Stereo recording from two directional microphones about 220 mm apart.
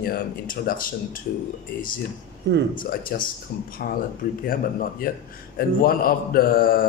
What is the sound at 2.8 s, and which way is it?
Speech, 40° left (ahead or behind).